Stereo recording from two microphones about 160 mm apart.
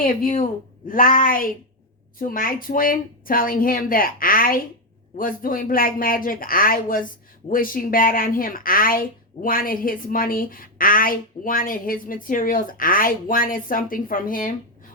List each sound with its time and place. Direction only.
0.0 s a man's voice: 55° left (ahead or behind)